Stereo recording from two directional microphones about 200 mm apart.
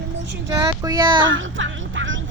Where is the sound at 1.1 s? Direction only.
70° right (ahead or behind).